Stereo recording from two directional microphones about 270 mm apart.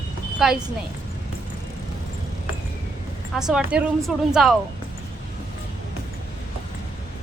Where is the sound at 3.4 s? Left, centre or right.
Centre.